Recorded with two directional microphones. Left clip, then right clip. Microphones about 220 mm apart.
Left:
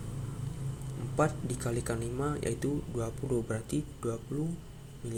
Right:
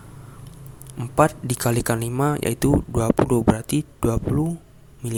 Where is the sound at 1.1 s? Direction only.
40° right (ahead or behind).